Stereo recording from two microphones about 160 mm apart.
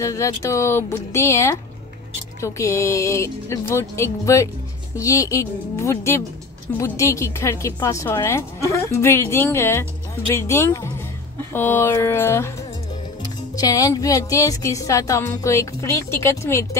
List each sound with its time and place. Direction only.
0.0 s a woman's voice: 20° left (ahead or behind)